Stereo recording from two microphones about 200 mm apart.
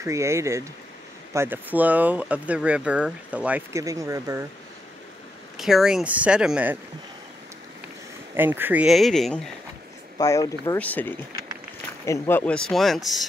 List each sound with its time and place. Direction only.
0.0 s speech: 15° right (ahead or behind)
5.6 s speech: centre (ahead or behind)
8.4 s speech: 10° right (ahead or behind)
10.1 s speech: 20° left (ahead or behind); by 13.2 s centre (ahead or behind)